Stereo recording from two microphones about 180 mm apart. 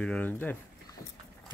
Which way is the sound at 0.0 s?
5° left (ahead or behind).